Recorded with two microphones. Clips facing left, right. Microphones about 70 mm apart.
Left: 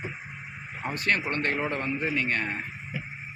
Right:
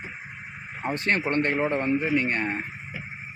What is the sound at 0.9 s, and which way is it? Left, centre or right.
Speech, right.